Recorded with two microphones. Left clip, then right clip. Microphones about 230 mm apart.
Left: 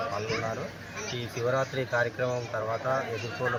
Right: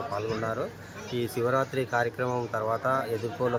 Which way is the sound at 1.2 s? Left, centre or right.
Centre.